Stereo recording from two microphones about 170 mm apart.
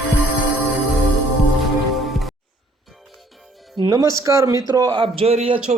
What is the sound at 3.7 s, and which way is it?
A man's voice, 20° right (ahead or behind).